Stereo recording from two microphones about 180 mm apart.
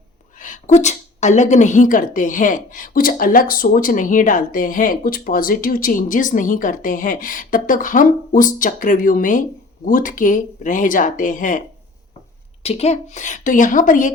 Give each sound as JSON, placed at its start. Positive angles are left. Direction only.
{"t": 0.3, "sound": "speech", "side_deg": 45}
{"t": 12.6, "sound": "speech", "side_deg": 35}